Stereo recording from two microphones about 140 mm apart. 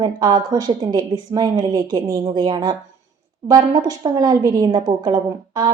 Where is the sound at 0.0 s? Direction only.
30° right (ahead or behind).